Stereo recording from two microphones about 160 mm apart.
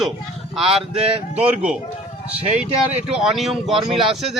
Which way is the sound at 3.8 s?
35° right (ahead or behind).